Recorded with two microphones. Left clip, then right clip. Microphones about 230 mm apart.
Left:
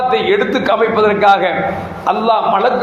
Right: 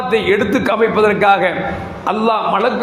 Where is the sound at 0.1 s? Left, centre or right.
Right.